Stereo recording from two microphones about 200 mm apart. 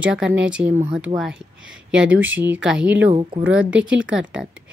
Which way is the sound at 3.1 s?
30° right (ahead or behind).